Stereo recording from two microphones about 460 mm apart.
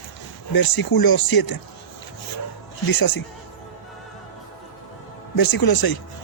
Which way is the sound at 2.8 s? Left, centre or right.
Left.